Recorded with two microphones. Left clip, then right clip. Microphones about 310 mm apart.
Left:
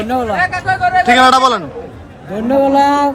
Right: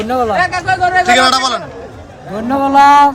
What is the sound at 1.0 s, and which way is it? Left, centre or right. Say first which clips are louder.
Speech: left 5 dB; centre.